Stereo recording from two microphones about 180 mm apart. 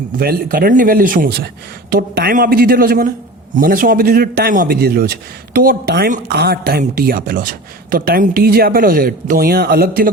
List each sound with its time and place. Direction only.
0.2 s a man's voice: 55° right (ahead or behind)